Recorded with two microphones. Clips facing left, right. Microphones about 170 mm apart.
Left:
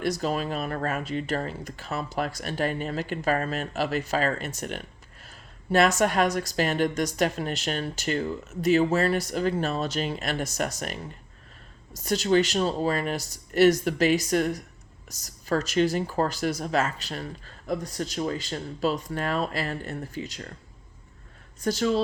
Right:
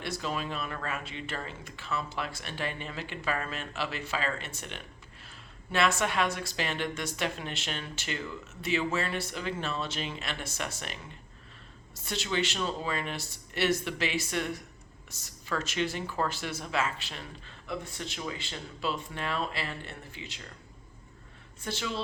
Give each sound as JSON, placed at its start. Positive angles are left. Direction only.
{"t": 0.0, "sound": "speech", "side_deg": 40}
{"t": 21.6, "sound": "speech", "side_deg": 40}